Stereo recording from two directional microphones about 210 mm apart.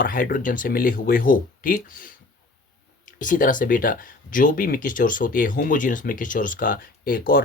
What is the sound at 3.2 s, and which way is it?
Speech, 40° left (ahead or behind).